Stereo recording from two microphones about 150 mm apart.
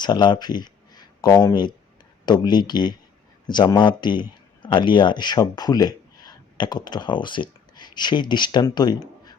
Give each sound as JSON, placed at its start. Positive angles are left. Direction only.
{"t": 0.0, "sound": "speech", "side_deg": 30}